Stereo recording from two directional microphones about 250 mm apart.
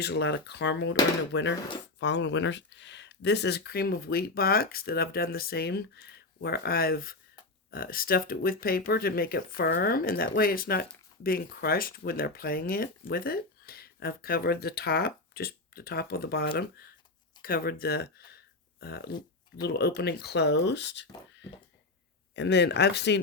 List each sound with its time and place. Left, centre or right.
0.0 s speech: left